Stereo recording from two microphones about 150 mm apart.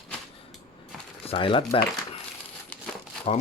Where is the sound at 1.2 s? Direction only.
35° left (ahead or behind).